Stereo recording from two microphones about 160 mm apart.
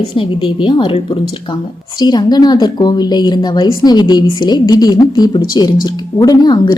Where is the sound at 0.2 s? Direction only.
35° left (ahead or behind).